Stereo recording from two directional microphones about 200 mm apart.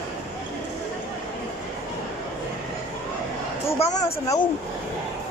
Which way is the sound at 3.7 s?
30° left (ahead or behind).